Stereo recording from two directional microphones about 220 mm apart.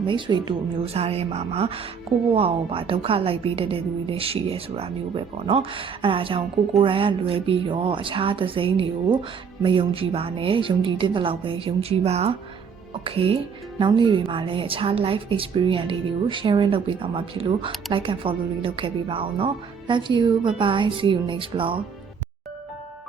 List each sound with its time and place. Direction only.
0.0 s a woman's voice: 20° right (ahead or behind)